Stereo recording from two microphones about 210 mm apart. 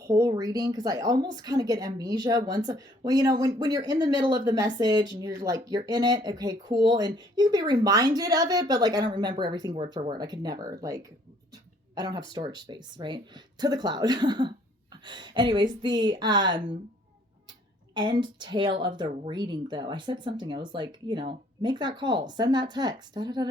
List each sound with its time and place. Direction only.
0.0 s speech: 15° right (ahead or behind)
17.9 s speech: 20° right (ahead or behind)